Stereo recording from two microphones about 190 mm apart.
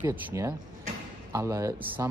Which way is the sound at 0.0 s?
10° right (ahead or behind).